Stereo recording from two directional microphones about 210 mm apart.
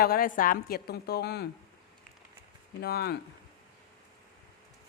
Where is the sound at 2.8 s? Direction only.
50° left (ahead or behind).